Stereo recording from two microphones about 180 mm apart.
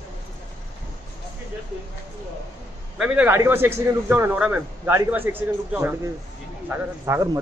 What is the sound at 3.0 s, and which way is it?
A man's voice, 10° right (ahead or behind).